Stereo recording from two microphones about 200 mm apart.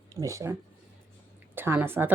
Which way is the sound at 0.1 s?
15° right (ahead or behind).